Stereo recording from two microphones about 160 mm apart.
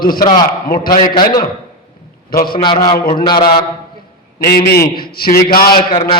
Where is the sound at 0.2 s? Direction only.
25° left (ahead or behind).